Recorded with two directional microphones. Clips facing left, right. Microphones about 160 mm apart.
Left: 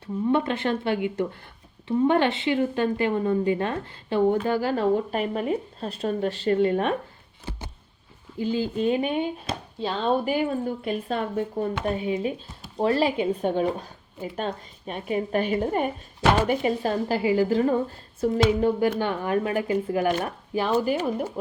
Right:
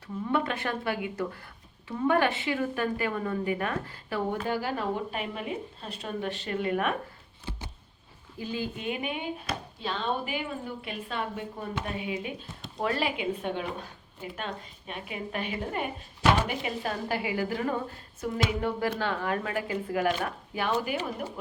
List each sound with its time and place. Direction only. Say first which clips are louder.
0.0 s a woman's voice: left 6 dB; 25° left (ahead or behind)
8.4 s a woman's voice: left 9 dB; 30° left (ahead or behind)